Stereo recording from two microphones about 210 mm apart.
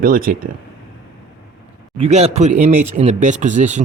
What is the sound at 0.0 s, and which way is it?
Speech, 40° right (ahead or behind).